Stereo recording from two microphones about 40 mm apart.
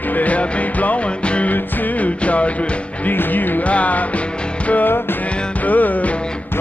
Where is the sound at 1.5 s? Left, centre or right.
Left.